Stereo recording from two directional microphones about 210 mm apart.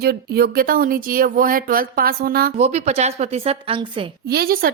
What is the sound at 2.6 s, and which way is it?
A woman's voice, 30° right (ahead or behind).